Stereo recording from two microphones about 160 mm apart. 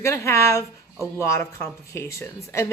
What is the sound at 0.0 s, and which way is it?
Speech, 15° left (ahead or behind).